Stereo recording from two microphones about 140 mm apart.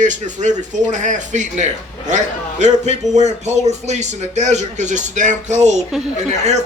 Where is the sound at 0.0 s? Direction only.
60° right (ahead or behind).